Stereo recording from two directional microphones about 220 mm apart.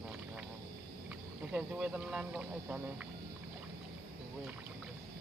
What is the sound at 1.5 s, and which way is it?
Speech, 5° right (ahead or behind).